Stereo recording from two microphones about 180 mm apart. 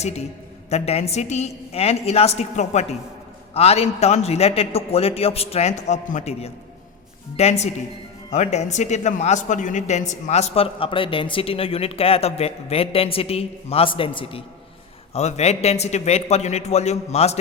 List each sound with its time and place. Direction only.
0.7 s speech: 35° left (ahead or behind)